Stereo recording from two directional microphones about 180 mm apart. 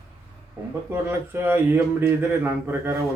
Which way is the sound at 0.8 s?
15° right (ahead or behind).